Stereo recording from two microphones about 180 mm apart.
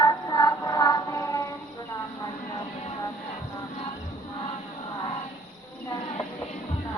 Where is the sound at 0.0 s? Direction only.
20° left (ahead or behind).